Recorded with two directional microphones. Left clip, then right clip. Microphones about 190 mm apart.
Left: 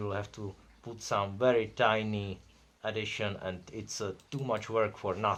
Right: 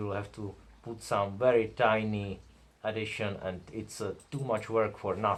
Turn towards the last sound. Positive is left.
turn(degrees=30)  # may be behind; listen again after turning